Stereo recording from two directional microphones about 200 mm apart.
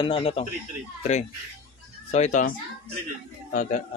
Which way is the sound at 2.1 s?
35° left (ahead or behind).